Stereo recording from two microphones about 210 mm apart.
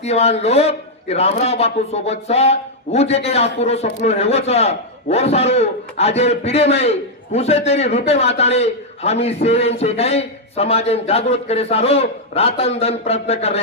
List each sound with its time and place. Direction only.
0.0 s a man's voice: 30° left (ahead or behind)